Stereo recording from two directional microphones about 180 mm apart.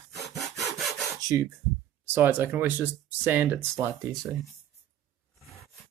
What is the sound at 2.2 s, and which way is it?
Speech, 10° right (ahead or behind).